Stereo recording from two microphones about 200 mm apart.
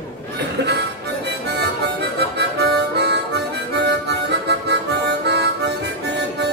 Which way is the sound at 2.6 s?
55° right (ahead or behind).